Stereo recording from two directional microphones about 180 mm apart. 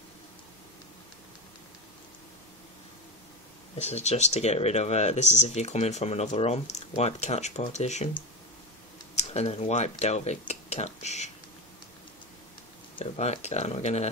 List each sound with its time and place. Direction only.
3.7 s speech: 40° left (ahead or behind)
9.3 s speech: 35° left (ahead or behind)
12.9 s speech: 35° left (ahead or behind)